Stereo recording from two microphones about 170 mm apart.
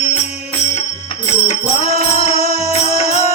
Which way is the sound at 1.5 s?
35° left (ahead or behind).